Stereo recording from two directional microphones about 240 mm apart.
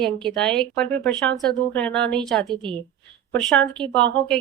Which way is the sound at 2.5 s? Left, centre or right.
Centre.